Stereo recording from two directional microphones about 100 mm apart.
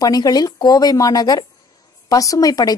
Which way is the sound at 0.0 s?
40° left (ahead or behind).